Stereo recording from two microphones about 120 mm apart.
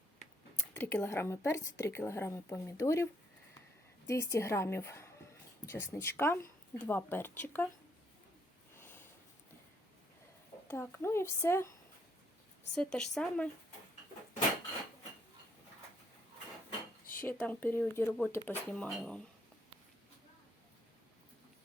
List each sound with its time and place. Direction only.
0.7 s speech: 15° left (ahead or behind)
8.8 s sniff: 15° left (ahead or behind)
10.7 s speech: 20° left (ahead or behind)
12.7 s speech: 5° left (ahead or behind)
17.2 s speech: 15° left (ahead or behind)